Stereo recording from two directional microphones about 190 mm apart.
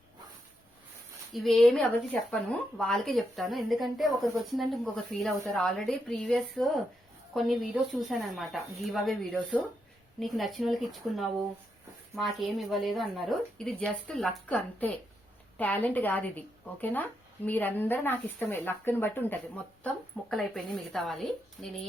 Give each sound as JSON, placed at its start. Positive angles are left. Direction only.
{"t": 1.3, "sound": "speech", "side_deg": 0}